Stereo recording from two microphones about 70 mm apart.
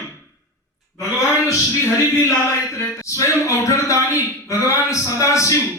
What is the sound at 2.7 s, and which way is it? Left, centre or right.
Speech, left.